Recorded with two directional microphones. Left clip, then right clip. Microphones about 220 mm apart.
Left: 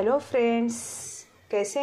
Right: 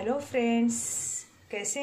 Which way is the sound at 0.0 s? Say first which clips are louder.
Left 6 dB; 20° left (ahead or behind).